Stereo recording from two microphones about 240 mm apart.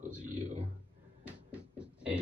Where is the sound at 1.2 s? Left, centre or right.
Centre.